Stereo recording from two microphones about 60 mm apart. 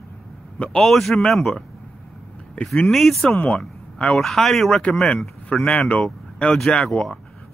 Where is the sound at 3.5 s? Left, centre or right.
Centre.